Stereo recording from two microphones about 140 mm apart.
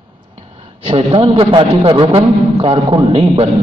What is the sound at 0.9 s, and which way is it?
A man's voice, 45° right (ahead or behind).